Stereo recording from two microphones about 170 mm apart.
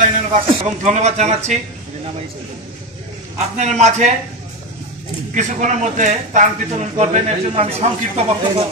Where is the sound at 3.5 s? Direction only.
40° right (ahead or behind).